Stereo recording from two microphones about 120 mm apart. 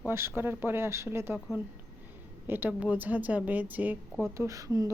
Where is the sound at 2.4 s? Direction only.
15° right (ahead or behind).